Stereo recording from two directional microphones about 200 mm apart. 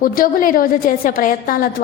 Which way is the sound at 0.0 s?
45° left (ahead or behind).